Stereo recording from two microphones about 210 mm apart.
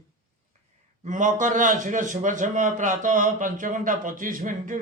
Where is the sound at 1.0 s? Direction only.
35° right (ahead or behind).